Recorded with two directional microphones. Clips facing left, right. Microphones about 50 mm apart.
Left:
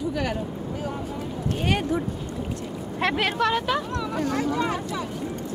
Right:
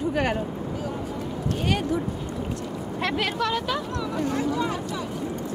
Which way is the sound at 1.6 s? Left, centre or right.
Left.